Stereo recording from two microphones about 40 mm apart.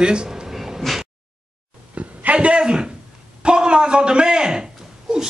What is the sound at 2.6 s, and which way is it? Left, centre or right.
Speech, right.